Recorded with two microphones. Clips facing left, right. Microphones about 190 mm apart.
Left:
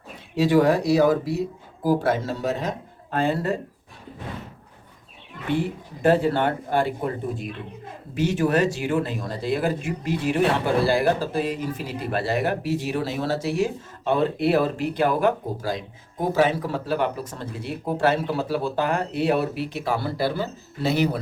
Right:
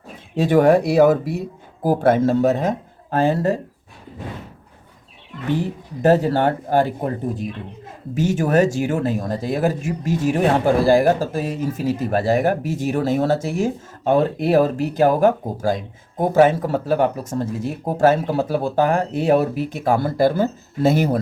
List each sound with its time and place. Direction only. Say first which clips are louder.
0.3 s speech: right 4 dB; 50° right (ahead or behind)
5.5 s speech: right 2 dB; 40° right (ahead or behind)